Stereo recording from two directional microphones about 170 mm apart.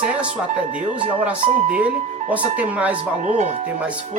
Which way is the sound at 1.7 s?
10° right (ahead or behind).